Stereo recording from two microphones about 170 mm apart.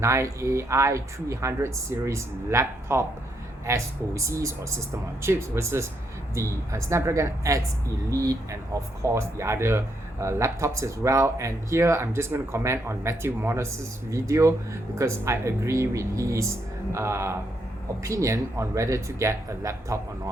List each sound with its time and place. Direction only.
0.0 s speech: 15° right (ahead or behind)